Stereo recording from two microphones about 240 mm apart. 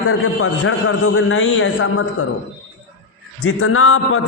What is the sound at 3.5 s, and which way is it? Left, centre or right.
Speech, left.